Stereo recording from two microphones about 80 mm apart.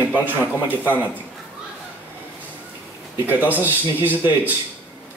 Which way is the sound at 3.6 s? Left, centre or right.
Right.